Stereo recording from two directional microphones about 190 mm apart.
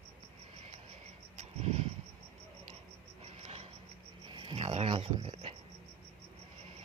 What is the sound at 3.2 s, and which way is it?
Cricket, 35° right (ahead or behind).